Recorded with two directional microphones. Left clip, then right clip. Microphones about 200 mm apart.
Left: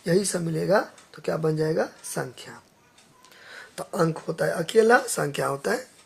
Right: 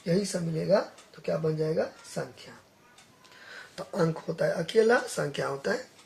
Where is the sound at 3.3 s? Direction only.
20° left (ahead or behind).